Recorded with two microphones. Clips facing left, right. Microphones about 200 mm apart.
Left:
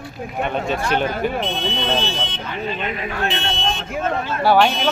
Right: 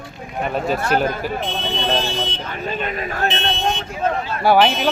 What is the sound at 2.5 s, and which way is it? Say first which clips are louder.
Speech: left 3 dB; 45° right (ahead or behind).